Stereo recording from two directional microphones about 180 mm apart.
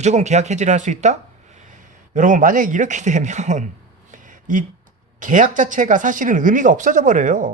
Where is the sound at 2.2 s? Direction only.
45° right (ahead or behind).